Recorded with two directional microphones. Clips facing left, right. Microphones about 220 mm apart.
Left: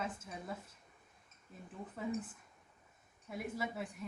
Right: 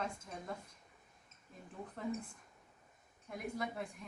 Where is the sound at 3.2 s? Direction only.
5° left (ahead or behind).